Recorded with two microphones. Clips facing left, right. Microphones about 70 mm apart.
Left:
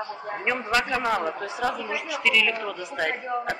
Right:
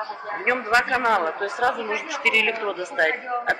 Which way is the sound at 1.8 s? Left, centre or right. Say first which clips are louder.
Right 3 dB; right.